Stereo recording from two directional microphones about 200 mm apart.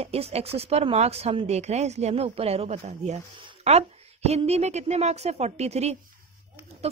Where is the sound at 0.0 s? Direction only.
30° right (ahead or behind).